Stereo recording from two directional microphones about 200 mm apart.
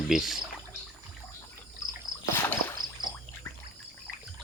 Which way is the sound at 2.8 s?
45° right (ahead or behind).